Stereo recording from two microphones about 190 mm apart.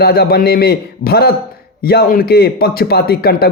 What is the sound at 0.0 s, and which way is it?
A man's voice, 55° left (ahead or behind).